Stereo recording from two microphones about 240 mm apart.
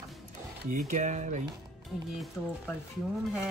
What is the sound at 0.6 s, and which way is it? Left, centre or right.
Speech, right.